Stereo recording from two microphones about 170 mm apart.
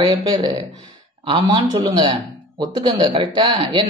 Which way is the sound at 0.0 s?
25° right (ahead or behind).